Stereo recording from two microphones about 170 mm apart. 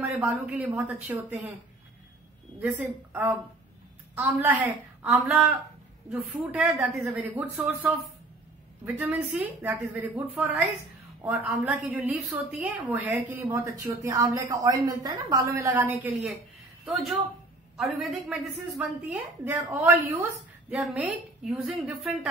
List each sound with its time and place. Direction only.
0.0 s a woman's voice: 5° right (ahead or behind)
2.6 s a woman's voice: 10° right (ahead or behind)
4.6 s a woman's voice: centre (ahead or behind); by 15.8 s 15° right (ahead or behind)
16.0 s a woman's voice: centre (ahead or behind)
19.1 s a woman's voice: 15° right (ahead or behind)
20.8 s a woman's voice: 5° right (ahead or behind)